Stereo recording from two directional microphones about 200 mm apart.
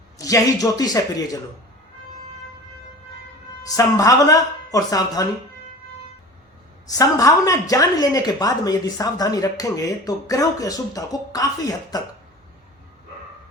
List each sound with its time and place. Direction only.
0.2 s a woman's voice: 15° left (ahead or behind)
3.6 s a woman's voice: 15° left (ahead or behind)
6.8 s a woman's voice: 20° left (ahead or behind)